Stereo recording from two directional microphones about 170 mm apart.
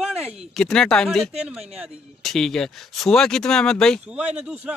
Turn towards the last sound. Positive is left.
turn(degrees=-5)  # may be behind; listen again after turning